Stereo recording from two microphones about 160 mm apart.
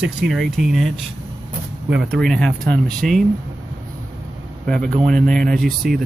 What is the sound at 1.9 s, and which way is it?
Speech, centre (ahead or behind).